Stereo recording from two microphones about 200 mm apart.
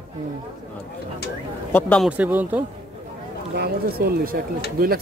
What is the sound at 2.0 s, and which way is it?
Speech, 5° right (ahead or behind).